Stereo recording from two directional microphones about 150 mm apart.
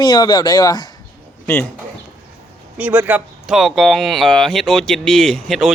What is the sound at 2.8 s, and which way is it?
Speech, 10° right (ahead or behind).